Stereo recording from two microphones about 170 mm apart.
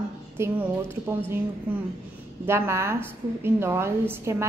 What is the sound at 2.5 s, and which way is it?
A woman's voice, 15° right (ahead or behind).